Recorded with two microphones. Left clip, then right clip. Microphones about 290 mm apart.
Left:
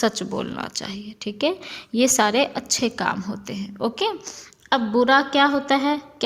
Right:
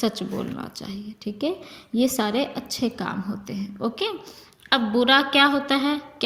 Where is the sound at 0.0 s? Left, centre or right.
Left.